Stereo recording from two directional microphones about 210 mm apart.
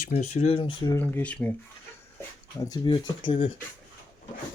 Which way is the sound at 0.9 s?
10° left (ahead or behind).